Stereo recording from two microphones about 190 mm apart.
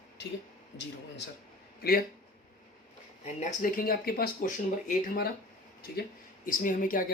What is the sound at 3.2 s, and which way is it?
Speech, 40° left (ahead or behind).